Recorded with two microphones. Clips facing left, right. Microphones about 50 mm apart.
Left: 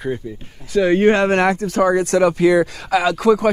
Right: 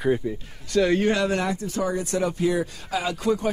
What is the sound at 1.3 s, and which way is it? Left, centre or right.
Speech, left.